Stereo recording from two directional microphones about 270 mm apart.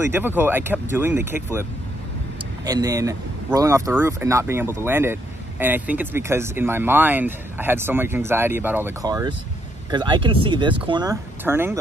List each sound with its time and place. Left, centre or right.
0.1 s speech: centre